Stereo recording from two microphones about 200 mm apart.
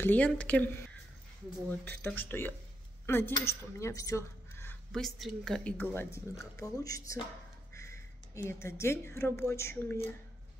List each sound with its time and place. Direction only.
0.0 s a woman's voice: 10° left (ahead or behind)
1.9 s a woman's voice: 10° left (ahead or behind)
7.7 s a sound: 15° left (ahead or behind)
8.5 s a woman's voice: 15° left (ahead or behind)